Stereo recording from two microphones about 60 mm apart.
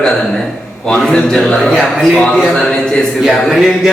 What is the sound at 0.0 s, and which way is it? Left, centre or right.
A man's voice, centre.